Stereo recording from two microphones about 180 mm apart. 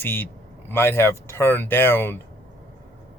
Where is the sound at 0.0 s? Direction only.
10° left (ahead or behind).